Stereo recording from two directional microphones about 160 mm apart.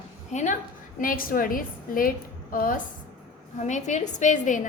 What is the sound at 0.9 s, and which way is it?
A woman's voice, 60° left (ahead or behind).